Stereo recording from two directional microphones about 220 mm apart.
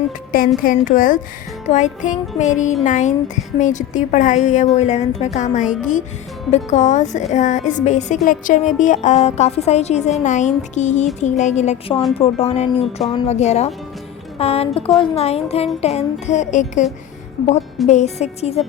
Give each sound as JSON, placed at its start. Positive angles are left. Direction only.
{"t": 0.3, "sound": "a woman's voice", "side_deg": 40}
{"t": 17.8, "sound": "speech", "side_deg": 30}